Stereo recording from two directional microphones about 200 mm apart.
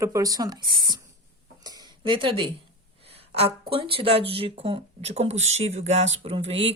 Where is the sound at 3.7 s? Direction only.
25° right (ahead or behind).